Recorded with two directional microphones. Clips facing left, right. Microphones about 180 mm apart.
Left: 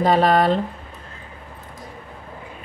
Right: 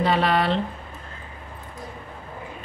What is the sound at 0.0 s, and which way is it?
Speech, 45° left (ahead or behind).